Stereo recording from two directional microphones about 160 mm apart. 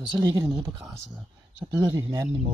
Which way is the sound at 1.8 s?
25° right (ahead or behind).